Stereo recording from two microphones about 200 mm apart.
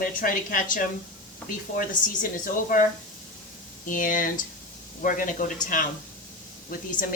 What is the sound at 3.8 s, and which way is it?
Speech, 40° left (ahead or behind).